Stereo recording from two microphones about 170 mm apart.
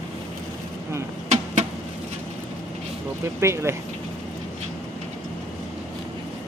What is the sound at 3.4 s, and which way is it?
Speech, 15° right (ahead or behind).